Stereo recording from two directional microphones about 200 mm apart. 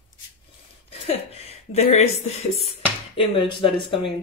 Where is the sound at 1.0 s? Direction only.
30° left (ahead or behind).